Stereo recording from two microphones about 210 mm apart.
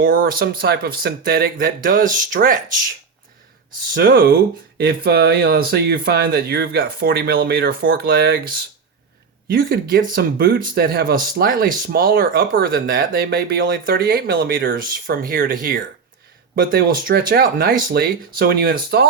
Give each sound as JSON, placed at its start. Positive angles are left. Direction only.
{"t": 0.0, "sound": "speech", "side_deg": -40}
{"t": 3.7, "sound": "speech", "side_deg": -45}